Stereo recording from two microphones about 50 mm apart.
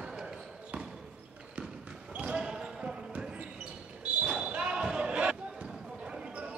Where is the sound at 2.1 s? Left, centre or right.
Right.